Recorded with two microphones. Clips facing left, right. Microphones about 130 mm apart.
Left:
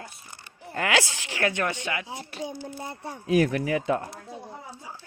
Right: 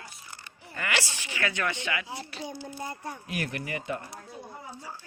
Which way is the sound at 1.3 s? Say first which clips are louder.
Left 5 dB; 55° left (ahead or behind).